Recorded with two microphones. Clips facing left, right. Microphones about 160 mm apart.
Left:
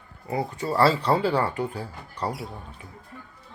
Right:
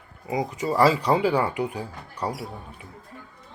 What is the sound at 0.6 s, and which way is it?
Speech, 10° right (ahead or behind).